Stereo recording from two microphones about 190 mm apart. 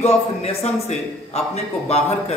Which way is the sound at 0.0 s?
35° left (ahead or behind).